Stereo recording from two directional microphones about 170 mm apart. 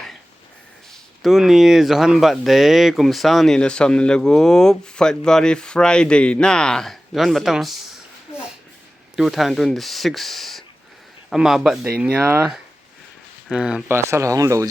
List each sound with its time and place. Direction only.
1.2 s speech: centre (ahead or behind)
9.1 s speech: centre (ahead or behind); by 14.7 s 20° right (ahead or behind)